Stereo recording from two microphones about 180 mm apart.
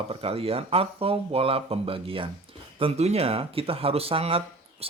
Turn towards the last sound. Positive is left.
turn(degrees=-30)  # may be behind; listen again after turning